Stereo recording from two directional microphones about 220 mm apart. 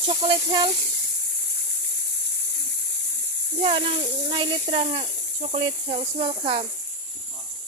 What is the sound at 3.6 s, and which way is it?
Speech, 25° right (ahead or behind).